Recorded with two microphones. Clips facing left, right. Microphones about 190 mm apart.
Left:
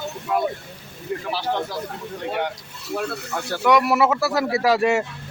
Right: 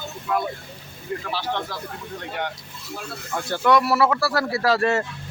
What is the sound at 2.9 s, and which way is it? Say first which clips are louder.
Speech: left 9 dB; 70° left (ahead or behind).